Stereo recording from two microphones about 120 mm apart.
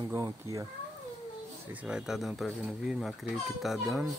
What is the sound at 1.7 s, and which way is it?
Speech, 10° right (ahead or behind).